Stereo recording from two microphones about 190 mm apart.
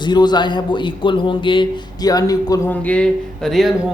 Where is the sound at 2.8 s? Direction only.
5° left (ahead or behind).